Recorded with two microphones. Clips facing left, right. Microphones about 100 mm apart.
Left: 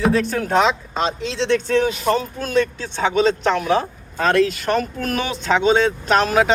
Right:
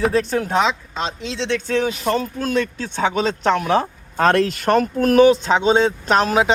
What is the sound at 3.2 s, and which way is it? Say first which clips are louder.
Speech: left 3 dB; 40° right (ahead or behind).